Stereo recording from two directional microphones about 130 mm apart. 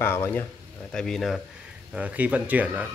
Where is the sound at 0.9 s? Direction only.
5° left (ahead or behind).